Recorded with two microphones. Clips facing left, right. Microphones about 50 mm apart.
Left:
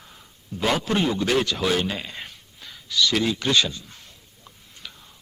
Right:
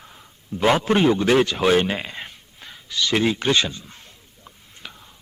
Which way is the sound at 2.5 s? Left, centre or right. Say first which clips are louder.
Left 2 dB; right.